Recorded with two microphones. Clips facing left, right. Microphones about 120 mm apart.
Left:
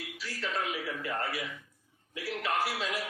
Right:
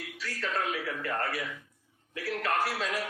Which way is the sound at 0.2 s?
35° right (ahead or behind).